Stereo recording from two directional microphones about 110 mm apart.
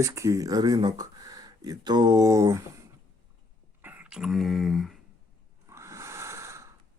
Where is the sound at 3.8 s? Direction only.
15° right (ahead or behind); by 5.0 s centre (ahead or behind).